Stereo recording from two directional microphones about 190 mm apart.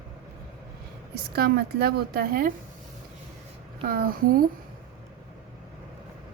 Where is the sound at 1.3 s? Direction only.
55° right (ahead or behind).